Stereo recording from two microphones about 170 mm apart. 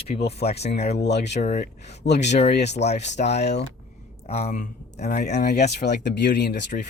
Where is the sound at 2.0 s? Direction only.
85° left.